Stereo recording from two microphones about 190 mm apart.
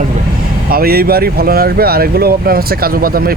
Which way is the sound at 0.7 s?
50° right (ahead or behind).